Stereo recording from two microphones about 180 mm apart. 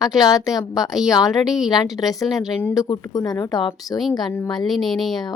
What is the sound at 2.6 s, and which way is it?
A woman's voice, 20° left (ahead or behind).